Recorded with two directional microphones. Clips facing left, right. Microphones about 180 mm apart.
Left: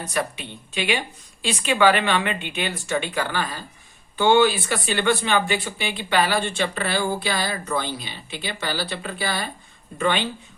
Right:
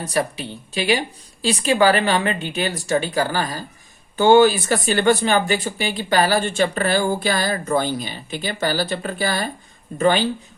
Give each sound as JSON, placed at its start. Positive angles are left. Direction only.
{"t": 0.0, "sound": "speech", "side_deg": -35}